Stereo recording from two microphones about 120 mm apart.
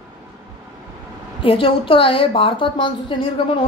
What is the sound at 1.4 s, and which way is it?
Speech, 50° left (ahead or behind).